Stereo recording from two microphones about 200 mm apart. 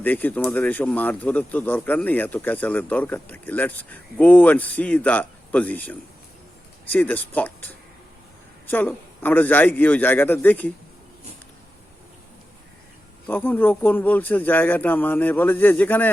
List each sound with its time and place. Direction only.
0.0 s speech: 10° left (ahead or behind)
13.2 s speech: 10° left (ahead or behind)